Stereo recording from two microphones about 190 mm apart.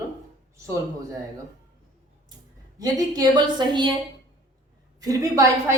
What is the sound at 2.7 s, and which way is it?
A man's voice, 20° right (ahead or behind).